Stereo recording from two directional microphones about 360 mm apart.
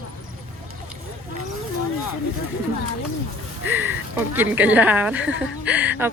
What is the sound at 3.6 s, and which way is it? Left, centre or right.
A woman's voice, centre.